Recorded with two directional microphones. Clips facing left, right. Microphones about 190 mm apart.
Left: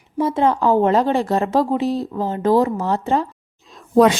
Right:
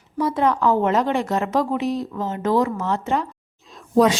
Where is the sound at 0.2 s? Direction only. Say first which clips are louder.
Left 2 dB; 25° left (ahead or behind).